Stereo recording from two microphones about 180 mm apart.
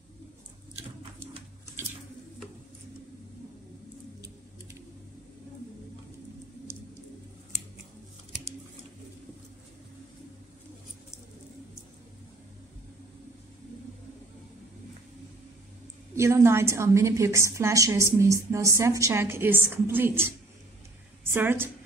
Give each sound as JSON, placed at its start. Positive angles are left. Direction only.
{"t": 16.2, "sound": "a woman's voice", "side_deg": -15}